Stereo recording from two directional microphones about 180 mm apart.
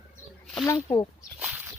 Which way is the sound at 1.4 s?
10° right (ahead or behind).